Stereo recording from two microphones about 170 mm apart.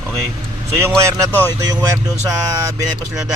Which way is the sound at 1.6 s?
20° right (ahead or behind).